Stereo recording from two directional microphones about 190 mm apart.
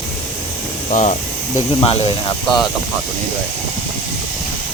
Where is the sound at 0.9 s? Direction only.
40° left (ahead or behind).